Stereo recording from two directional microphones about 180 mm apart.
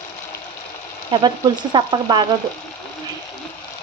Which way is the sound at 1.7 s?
25° right (ahead or behind).